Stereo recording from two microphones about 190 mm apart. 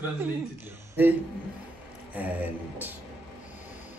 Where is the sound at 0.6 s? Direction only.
10° right (ahead or behind).